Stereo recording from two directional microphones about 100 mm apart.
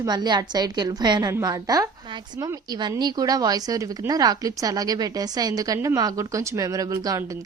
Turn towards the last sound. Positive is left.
turn(degrees=-40)  # may be behind; listen again after turning